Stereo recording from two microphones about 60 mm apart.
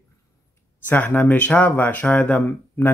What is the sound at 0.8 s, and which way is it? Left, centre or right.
Speech, left.